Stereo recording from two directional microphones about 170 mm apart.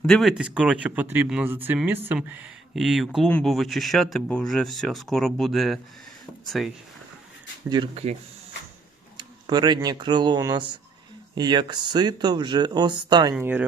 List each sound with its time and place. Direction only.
0.0 s speech: centre (ahead or behind)
7.7 s speech: 35° right (ahead or behind)
9.1 s speech: 25° right (ahead or behind)
13.3 s speech: 10° right (ahead or behind)